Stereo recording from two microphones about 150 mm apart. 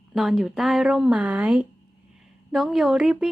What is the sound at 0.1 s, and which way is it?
A woman's voice, centre (ahead or behind).